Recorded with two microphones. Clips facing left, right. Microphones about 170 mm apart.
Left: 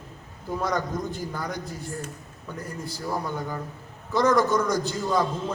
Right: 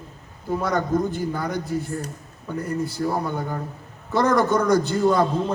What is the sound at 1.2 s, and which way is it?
Speech, 60° right (ahead or behind).